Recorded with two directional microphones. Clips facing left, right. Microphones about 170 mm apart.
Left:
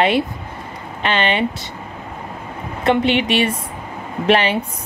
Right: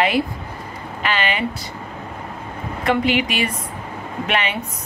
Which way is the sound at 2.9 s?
25° left (ahead or behind).